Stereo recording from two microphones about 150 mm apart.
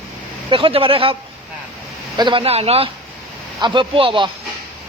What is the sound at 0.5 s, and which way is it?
Speech, 35° right (ahead or behind).